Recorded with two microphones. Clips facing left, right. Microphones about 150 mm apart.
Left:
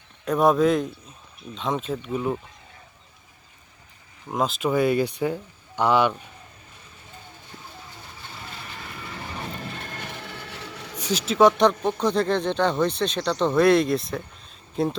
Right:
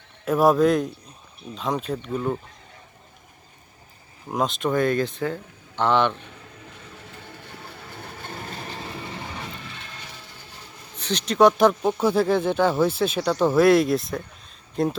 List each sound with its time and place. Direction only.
0.3 s speech: centre (ahead or behind)
4.3 s speech: centre (ahead or behind)
6.9 s train: 70° right (ahead or behind); by 9.1 s 25° right (ahead or behind)
9.4 s a sound: 45° left (ahead or behind); by 10.9 s 80° left
11.0 s speech: 5° left (ahead or behind)